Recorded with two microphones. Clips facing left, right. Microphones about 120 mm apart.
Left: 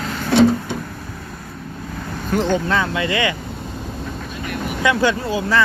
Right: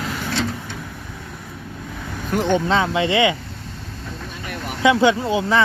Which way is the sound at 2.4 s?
20° right (ahead or behind).